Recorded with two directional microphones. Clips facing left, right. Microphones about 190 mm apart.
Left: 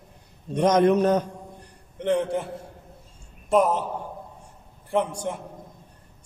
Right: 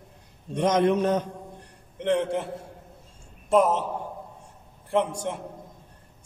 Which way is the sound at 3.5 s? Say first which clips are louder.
Even; centre (ahead or behind).